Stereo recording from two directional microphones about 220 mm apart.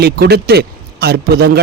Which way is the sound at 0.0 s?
45° right (ahead or behind).